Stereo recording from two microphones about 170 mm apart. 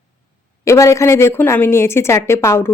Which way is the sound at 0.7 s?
15° left (ahead or behind).